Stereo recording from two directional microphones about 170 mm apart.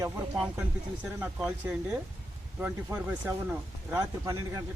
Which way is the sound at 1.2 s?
10° right (ahead or behind).